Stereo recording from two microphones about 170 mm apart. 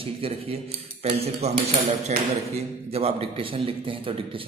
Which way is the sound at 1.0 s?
35° right (ahead or behind).